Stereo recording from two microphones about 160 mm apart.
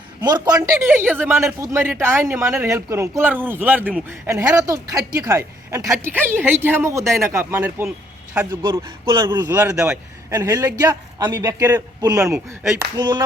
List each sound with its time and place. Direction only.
0.2 s a man's voice: 25° right (ahead or behind)
9.0 s a man's voice: 30° right (ahead or behind)